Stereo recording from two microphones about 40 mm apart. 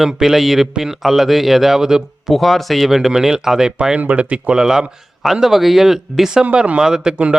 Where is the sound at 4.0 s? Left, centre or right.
Right.